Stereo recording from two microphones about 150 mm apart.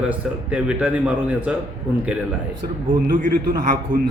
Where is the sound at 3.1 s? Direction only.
60° right (ahead or behind).